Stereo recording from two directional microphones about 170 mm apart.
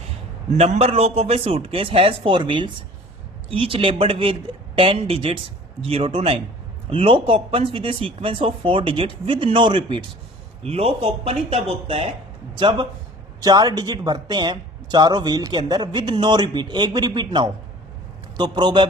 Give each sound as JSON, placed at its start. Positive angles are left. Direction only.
{"t": 0.5, "sound": "speech", "side_deg": -35}